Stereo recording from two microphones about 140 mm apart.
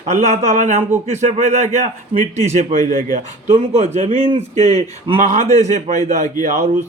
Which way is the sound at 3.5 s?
50° right (ahead or behind).